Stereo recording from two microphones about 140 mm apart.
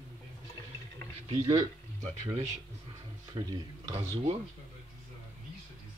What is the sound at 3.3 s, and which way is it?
Speech, 25° right (ahead or behind).